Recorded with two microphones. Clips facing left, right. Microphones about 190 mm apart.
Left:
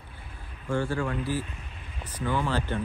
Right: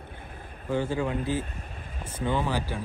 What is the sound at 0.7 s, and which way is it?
Speech, 20° right (ahead or behind).